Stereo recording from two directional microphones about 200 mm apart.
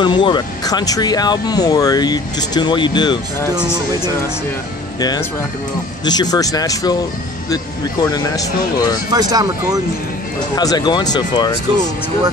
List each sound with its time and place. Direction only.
0.0 s speech: 20° left (ahead or behind)
6.0 s speech: 20° left (ahead or behind)
9.1 s speech: 20° right (ahead or behind)
10.5 s speech: 20° left (ahead or behind)